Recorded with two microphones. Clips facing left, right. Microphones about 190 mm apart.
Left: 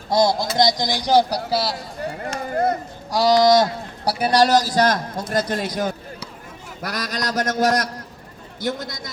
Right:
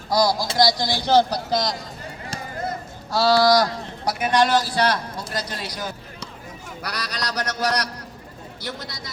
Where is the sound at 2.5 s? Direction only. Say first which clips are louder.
Left 10 dB; 60° left (ahead or behind).